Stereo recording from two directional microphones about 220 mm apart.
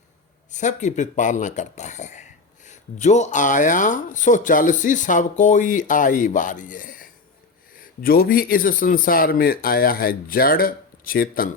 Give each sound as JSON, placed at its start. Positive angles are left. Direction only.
{"t": 0.5, "sound": "speech", "side_deg": 35}